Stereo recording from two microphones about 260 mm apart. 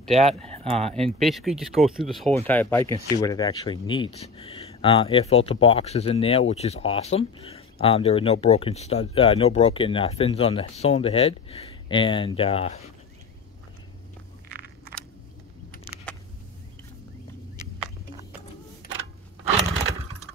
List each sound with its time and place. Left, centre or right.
0.0 s speech: centre
0.5 s speech: right
0.9 s speech: centre; by 12.9 s left